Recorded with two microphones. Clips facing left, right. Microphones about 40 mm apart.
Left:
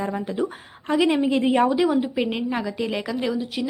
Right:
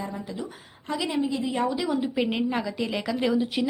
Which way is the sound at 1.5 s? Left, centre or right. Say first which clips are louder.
Left 8 dB; left.